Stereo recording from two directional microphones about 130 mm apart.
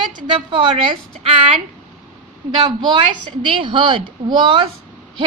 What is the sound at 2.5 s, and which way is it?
A woman's voice, 35° right (ahead or behind).